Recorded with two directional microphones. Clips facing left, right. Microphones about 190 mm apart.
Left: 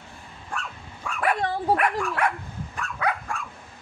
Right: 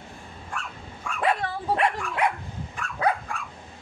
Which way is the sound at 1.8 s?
15° right (ahead or behind).